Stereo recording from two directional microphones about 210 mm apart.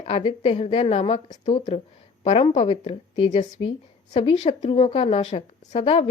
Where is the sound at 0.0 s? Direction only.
30° left (ahead or behind).